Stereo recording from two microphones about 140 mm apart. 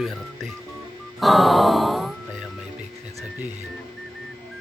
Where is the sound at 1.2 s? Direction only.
Centre (ahead or behind).